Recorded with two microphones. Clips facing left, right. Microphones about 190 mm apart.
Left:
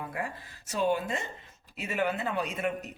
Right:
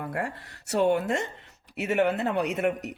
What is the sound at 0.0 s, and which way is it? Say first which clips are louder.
Speech: right 4 dB; 70° right (ahead or behind).